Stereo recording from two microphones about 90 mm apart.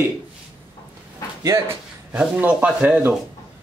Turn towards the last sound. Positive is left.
turn(degrees=-15)  # may be behind; listen again after turning